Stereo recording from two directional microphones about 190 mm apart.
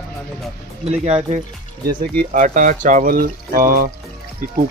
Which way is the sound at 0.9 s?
30° right (ahead or behind).